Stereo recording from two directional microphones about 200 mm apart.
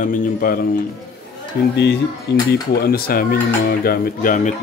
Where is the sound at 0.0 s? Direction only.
45° left (ahead or behind).